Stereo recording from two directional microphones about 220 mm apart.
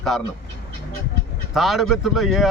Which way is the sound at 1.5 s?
Centre (ahead or behind).